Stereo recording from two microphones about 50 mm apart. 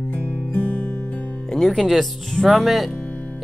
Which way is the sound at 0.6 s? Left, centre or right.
Left.